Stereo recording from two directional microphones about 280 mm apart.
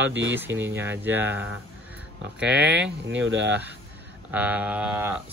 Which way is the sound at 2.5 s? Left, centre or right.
Right.